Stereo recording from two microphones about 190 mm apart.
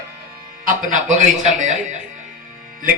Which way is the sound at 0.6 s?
40° right (ahead or behind).